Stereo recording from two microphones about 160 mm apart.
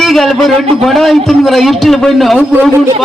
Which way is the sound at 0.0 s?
Centre (ahead or behind).